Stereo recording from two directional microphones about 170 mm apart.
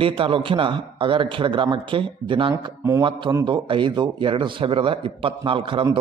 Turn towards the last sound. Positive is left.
turn(degrees=-30)  # may be behind; listen again after turning